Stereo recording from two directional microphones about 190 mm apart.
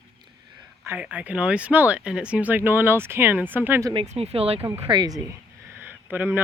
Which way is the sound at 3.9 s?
30° right (ahead or behind).